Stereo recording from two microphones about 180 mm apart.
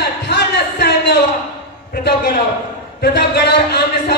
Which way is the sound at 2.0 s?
55° left (ahead or behind).